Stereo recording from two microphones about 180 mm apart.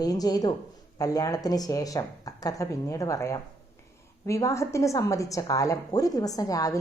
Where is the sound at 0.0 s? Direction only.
20° left (ahead or behind).